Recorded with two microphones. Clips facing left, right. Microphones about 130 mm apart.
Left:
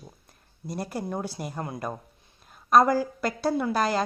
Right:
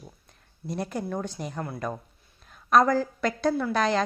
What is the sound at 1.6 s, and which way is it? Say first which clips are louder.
Speech: even; 20° left (ahead or behind).